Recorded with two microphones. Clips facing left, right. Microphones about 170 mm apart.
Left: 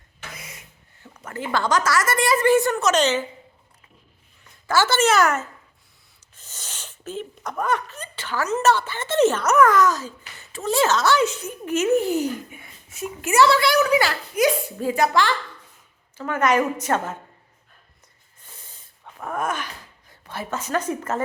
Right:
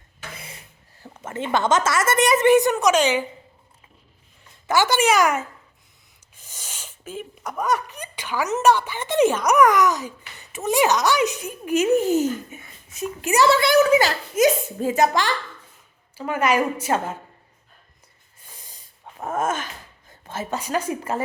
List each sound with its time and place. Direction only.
0.3 s a sound: 30° right (ahead or behind)
1.0 s a woman's voice: 25° right (ahead or behind)
4.6 s a woman's voice: 15° right (ahead or behind)
12.5 s a sound: 20° right (ahead or behind)
13.5 s a woman's voice: 20° right (ahead or behind)
18.4 s snort: 15° right (ahead or behind)
19.2 s a woman's voice: 25° right (ahead or behind)